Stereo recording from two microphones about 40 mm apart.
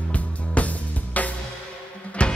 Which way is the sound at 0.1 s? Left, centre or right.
Left.